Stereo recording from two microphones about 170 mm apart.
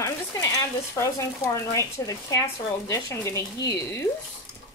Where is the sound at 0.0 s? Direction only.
20° left (ahead or behind).